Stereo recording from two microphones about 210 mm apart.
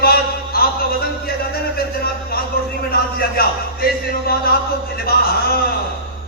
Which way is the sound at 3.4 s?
45° left (ahead or behind).